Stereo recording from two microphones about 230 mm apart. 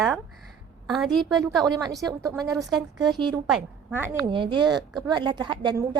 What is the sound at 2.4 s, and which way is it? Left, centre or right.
A woman's voice, centre.